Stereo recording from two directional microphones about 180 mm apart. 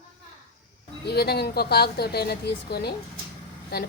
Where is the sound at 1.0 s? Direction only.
65° left (ahead or behind).